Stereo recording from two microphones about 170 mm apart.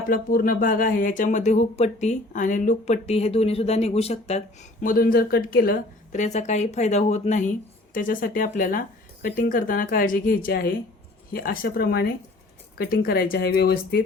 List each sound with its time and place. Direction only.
0.1 s speech: 55° left (ahead or behind)